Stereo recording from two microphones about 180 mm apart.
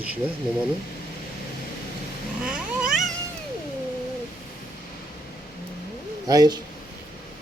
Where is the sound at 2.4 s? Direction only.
5° right (ahead or behind).